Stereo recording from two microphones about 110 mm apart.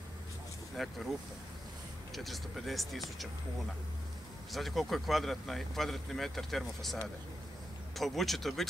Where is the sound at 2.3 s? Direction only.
Centre (ahead or behind).